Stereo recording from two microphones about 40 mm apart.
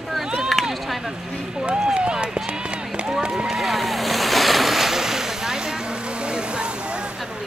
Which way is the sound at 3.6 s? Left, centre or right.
Centre.